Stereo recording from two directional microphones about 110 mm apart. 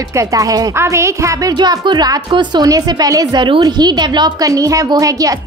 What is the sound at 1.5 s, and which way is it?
A woman's voice, 40° right (ahead or behind).